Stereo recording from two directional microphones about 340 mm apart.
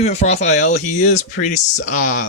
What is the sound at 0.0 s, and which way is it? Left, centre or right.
Speech, centre.